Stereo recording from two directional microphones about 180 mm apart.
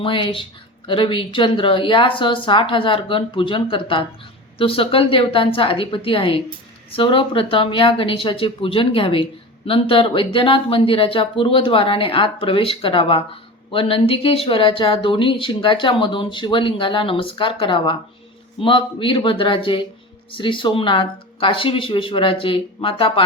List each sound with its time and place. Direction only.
0.0 s a woman's voice: 30° left (ahead or behind)